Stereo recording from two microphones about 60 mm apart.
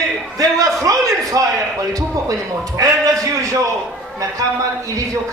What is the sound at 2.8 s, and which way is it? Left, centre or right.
Speech, right.